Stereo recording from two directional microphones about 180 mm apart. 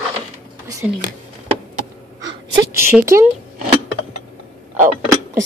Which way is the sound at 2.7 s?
15° right (ahead or behind).